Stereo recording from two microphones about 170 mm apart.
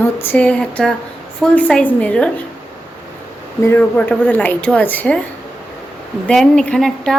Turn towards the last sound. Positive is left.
turn(degrees=5)  # may be behind; listen again after turning